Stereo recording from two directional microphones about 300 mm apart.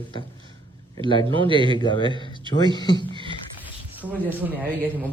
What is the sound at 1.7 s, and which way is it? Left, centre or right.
Speech, centre.